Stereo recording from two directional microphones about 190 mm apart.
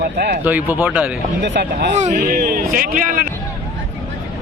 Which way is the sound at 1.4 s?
65° right (ahead or behind).